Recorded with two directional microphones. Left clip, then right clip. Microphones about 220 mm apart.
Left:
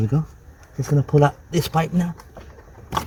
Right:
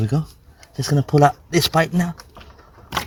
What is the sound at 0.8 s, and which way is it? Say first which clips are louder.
Speech: right 3 dB; 45° right (ahead or behind).